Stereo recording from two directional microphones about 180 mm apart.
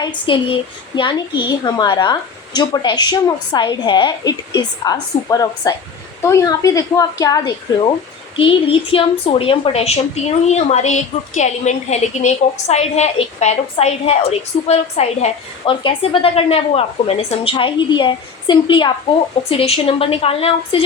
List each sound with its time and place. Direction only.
0.0 s a woman's voice: 30° left (ahead or behind)